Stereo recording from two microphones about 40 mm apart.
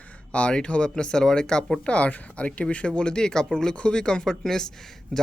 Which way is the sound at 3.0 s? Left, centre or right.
Centre.